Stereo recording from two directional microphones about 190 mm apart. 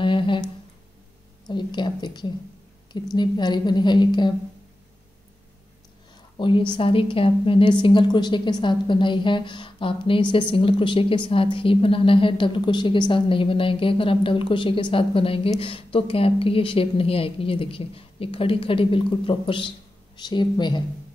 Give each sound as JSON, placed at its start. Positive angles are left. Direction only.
{"t": 0.0, "sound": "a sound", "side_deg": 25}
{"t": 1.5, "sound": "a woman's voice", "side_deg": 25}
{"t": 6.3, "sound": "a woman's voice", "side_deg": 25}